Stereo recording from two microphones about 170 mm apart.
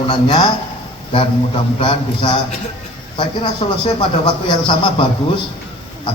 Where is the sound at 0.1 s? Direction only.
30° left (ahead or behind).